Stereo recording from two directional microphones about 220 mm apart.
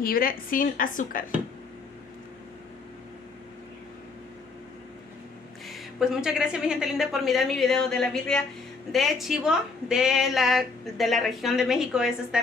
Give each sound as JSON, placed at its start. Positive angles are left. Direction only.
{"t": 0.0, "sound": "a woman's voice", "side_deg": 40}
{"t": 5.7, "sound": "a woman's voice", "side_deg": 0}